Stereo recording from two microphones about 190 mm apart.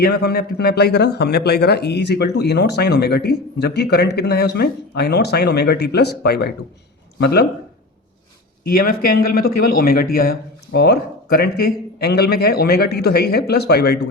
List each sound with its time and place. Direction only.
0.0 s speech: 60° left (ahead or behind)
8.6 s speech: 50° left (ahead or behind)